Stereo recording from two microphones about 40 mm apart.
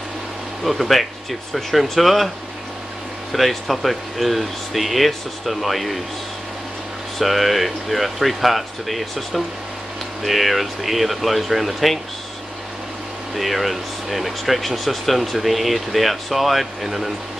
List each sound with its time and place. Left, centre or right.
0.7 s speech: centre
3.3 s speech: centre
7.2 s speech: centre
13.4 s speech: centre